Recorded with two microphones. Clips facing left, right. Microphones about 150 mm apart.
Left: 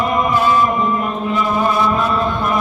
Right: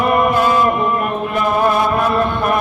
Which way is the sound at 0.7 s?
60° right (ahead or behind).